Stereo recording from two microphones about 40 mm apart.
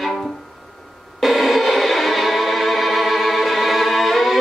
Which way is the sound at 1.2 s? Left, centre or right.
Centre.